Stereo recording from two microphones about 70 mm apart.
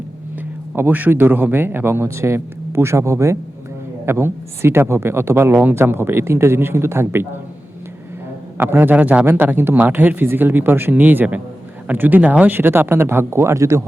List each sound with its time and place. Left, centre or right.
0.8 s a man's voice: right
8.5 s a man's voice: right